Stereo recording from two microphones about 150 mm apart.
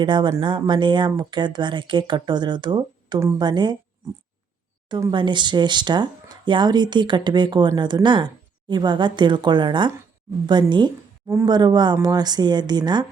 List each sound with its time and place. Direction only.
0.0 s speech: 30° right (ahead or behind)
4.9 s speech: 20° right (ahead or behind)
5.1 s speech: 30° right (ahead or behind)